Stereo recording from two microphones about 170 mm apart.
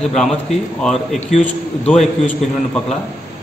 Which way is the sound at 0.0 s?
5° left (ahead or behind).